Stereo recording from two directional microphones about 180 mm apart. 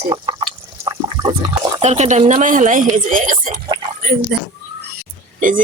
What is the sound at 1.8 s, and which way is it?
Speech, 40° right (ahead or behind).